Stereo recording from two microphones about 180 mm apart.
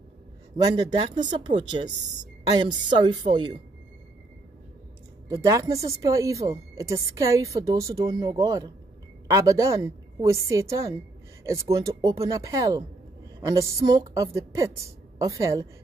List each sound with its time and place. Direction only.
0.7 s speech: 25° right (ahead or behind)
5.3 s a woman's voice: 20° right (ahead or behind)